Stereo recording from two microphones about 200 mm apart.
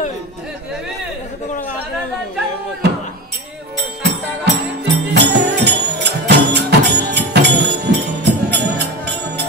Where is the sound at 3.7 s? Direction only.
55° right (ahead or behind).